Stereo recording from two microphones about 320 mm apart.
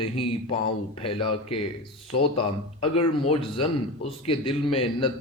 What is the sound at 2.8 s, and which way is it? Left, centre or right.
A man's voice, centre.